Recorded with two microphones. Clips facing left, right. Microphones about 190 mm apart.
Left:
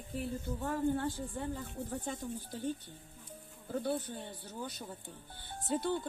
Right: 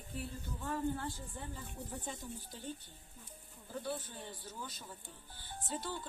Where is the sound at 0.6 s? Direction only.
40° left (ahead or behind).